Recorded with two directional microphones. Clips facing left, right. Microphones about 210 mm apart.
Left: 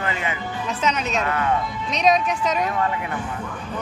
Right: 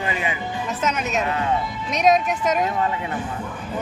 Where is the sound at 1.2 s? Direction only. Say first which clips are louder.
Left 1 dB; 20° right (ahead or behind).